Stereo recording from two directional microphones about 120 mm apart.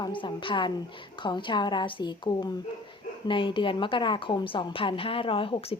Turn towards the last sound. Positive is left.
turn(degrees=50)  # may be behind; listen again after turning